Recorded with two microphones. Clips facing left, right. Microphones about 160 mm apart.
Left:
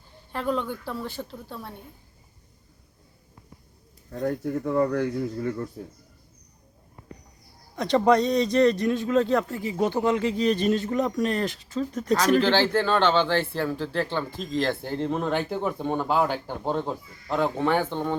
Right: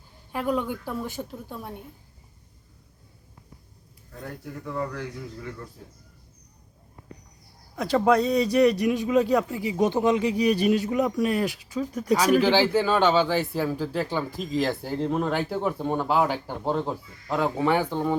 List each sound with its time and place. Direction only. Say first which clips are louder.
0.3 s speech: right 1 dB; 10° right (ahead or behind)
4.1 s speech: left 11 dB; 40° left (ahead or behind)
7.8 s speech: left 1 dB; 5° right (ahead or behind)